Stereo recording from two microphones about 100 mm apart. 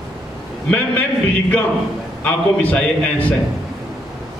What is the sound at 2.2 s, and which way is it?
A man's voice, 15° left (ahead or behind).